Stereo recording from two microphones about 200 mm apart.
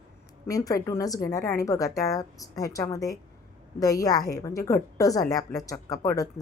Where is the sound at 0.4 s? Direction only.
15° left (ahead or behind).